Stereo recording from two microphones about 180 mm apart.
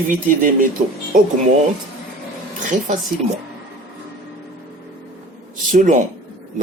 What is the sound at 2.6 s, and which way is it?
Speech, 45° right (ahead or behind).